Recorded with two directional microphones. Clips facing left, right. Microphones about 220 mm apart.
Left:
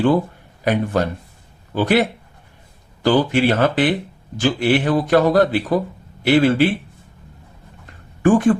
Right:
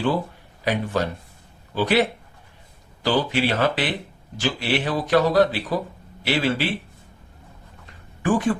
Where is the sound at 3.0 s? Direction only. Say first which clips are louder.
Left 6 dB; 50° left (ahead or behind).